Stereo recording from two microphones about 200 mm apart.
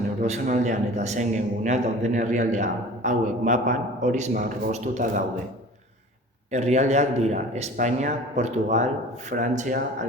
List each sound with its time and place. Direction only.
0.2 s a man's voice: 40° right (ahead or behind)
6.5 s a man's voice: 35° right (ahead or behind)